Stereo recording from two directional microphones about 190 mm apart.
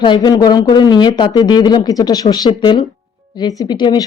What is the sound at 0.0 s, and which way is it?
Speech, 25° left (ahead or behind).